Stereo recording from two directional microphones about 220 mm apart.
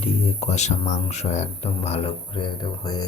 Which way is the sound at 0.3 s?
30° left (ahead or behind).